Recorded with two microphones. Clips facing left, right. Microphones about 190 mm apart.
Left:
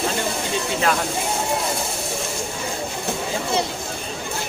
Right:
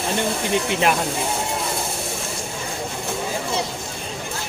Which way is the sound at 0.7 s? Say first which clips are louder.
Even; 20° right (ahead or behind).